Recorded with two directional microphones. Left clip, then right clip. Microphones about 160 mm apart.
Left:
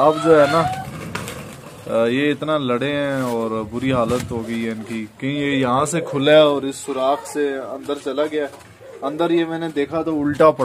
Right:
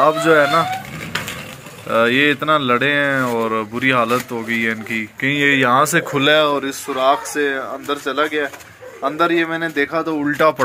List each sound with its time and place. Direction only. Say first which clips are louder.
0.0 s speech: even; centre (ahead or behind)
1.9 s speech: right 4 dB; centre (ahead or behind)
6.2 s speech: left 3 dB; 15° left (ahead or behind)
9.9 s speech: even; 25° left (ahead or behind)